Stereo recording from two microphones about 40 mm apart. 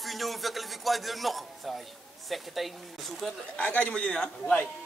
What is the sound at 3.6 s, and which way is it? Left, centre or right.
Speech, left.